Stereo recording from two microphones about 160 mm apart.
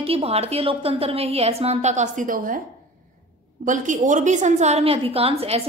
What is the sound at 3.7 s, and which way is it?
A woman's voice, 50° right (ahead or behind).